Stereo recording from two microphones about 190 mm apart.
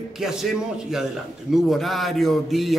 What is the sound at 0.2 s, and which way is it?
A man's voice, centre (ahead or behind).